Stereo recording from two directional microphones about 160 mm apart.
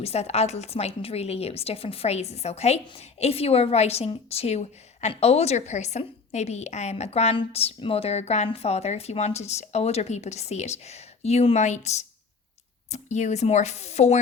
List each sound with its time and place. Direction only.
0.0 s a woman's voice: 40° left (ahead or behind)